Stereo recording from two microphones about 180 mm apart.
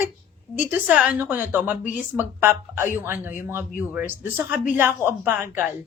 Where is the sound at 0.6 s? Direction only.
10° right (ahead or behind).